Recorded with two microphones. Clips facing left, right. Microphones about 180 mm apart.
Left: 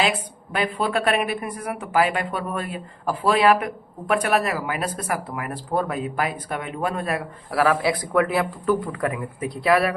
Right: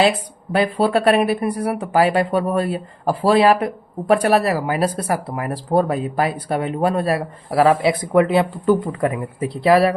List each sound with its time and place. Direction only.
0.0 s speech: 35° right (ahead or behind)